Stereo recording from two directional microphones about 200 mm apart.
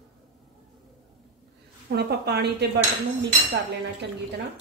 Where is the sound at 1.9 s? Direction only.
55° right (ahead or behind).